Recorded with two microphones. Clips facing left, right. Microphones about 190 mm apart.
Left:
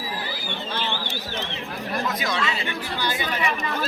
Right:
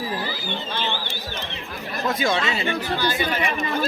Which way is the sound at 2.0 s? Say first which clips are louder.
Right 8 dB; 25° right (ahead or behind).